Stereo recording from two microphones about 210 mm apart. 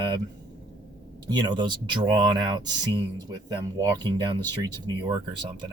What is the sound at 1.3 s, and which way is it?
Speech, 20° right (ahead or behind).